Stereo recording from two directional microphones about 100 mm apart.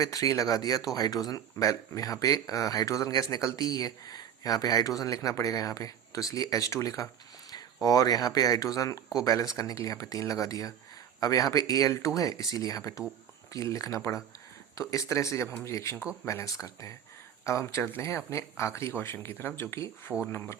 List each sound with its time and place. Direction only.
0.0 s speech: 35° left (ahead or behind)